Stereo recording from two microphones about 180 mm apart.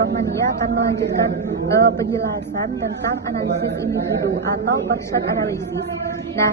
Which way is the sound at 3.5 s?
70° right (ahead or behind).